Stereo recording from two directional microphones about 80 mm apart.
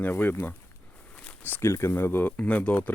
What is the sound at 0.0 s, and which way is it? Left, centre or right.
Speech, left.